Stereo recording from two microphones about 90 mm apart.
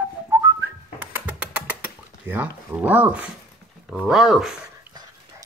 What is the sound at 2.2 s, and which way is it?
Speech, 20° right (ahead or behind).